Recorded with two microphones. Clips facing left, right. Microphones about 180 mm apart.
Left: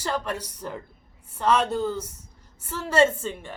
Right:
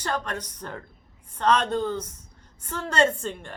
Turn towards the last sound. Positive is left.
turn(degrees=5)  # may be behind; listen again after turning